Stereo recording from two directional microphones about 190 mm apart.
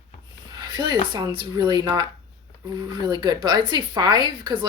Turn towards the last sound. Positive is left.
turn(degrees=-25)  # may be behind; listen again after turning